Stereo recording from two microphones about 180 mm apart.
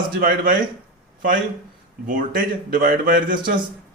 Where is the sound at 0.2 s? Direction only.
50° right (ahead or behind).